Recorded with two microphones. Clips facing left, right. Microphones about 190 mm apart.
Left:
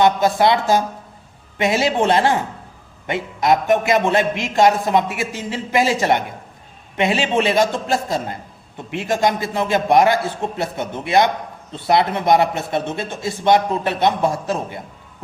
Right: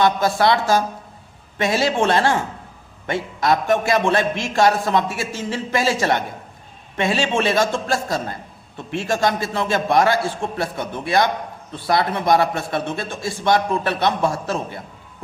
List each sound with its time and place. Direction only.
0.0 s a man's voice: 20° left (ahead or behind)